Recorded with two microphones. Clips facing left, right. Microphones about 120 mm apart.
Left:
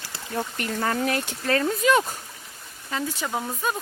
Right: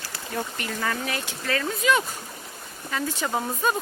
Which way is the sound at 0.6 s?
50° left (ahead or behind).